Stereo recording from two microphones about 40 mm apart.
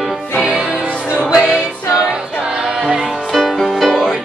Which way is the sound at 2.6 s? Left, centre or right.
Right.